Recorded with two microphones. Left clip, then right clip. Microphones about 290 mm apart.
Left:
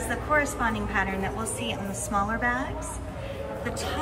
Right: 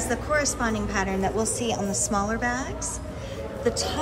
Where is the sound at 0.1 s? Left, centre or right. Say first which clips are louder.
Even; centre.